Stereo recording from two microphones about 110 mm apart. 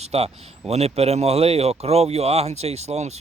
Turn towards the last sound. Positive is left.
turn(degrees=-75)  # may be behind; listen again after turning